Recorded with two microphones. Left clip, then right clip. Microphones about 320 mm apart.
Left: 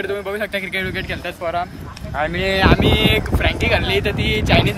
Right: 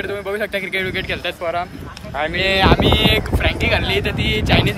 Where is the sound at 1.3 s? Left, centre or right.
Right.